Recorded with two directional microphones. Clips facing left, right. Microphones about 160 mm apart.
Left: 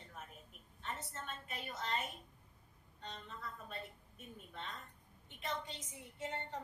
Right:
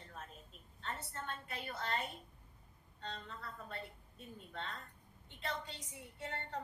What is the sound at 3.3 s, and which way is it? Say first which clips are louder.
A woman's voice: even; 20° left (ahead or behind).